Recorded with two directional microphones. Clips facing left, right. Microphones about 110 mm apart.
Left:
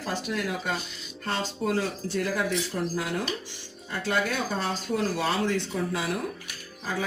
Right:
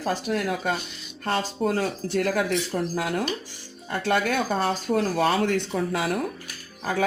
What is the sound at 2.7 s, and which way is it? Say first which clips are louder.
Speech: right 3 dB; 80° right.